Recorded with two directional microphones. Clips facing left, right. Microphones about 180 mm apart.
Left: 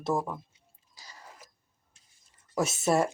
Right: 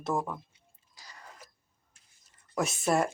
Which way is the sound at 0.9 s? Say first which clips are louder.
Left 1 dB; 5° left (ahead or behind).